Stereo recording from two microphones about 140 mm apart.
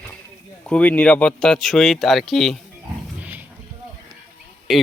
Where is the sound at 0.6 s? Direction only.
10° left (ahead or behind).